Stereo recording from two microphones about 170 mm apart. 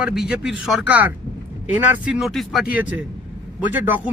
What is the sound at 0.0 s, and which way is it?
A man's voice, 5° right (ahead or behind).